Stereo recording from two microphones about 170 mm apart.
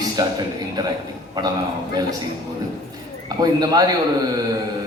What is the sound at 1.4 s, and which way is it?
Speech, 20° right (ahead or behind).